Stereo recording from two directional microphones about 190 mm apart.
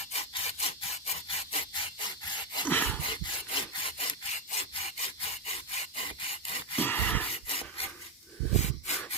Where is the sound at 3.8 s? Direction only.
25° left (ahead or behind).